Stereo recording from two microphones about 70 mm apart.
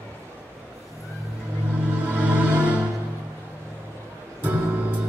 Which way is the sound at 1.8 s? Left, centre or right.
Right.